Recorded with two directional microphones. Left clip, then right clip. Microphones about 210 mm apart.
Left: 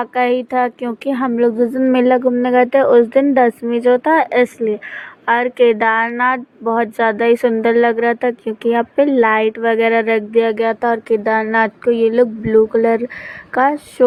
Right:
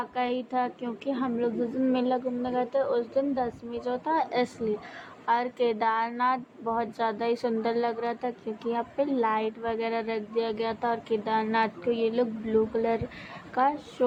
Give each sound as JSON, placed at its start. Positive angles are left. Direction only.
{"t": 0.0, "sound": "a woman's voice", "side_deg": 30}